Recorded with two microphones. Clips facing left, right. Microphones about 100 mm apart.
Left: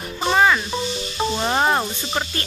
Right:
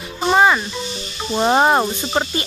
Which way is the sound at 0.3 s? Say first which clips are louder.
Right 3 dB; 20° right (ahead or behind).